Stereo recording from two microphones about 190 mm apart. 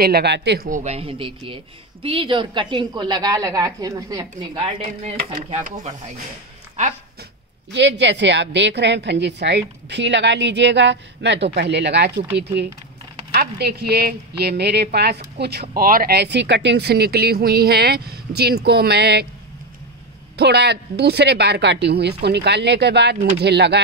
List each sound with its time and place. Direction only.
0.0 s a woman's voice: 60° right (ahead or behind)
0.7 s a woman's voice: 40° right (ahead or behind)
7.7 s a woman's voice: 65° right (ahead or behind)
13.3 s a woman's voice: 55° right (ahead or behind)
15.7 s a woman's voice: 50° right (ahead or behind)
20.3 s a woman's voice: 60° right (ahead or behind)